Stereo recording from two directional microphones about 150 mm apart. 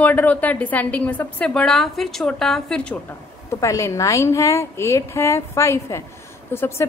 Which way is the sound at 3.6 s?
20° left (ahead or behind).